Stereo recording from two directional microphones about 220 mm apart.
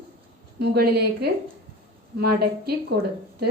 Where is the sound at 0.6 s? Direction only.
45° right (ahead or behind).